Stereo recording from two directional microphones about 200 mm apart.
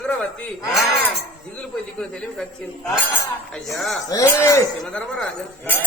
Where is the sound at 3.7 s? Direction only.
Centre (ahead or behind).